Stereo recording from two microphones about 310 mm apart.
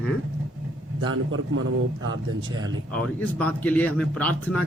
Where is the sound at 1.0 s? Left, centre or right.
Right.